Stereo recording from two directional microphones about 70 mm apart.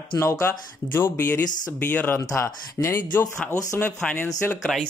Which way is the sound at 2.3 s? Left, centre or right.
Left.